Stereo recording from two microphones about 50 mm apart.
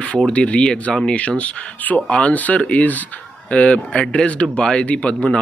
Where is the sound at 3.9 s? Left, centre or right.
Centre.